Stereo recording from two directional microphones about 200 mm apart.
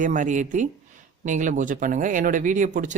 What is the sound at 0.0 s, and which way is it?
Speech, 40° right (ahead or behind).